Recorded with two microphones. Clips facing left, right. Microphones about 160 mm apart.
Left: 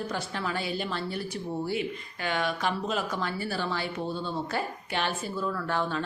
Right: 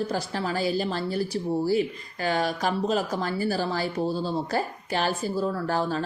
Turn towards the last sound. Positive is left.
turn(degrees=-35)  # may be behind; listen again after turning